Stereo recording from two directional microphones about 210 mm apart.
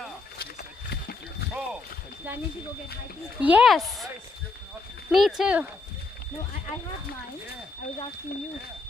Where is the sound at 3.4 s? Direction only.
5° right (ahead or behind).